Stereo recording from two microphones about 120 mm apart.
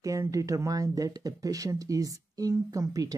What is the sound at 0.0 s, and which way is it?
Speech, 25° right (ahead or behind).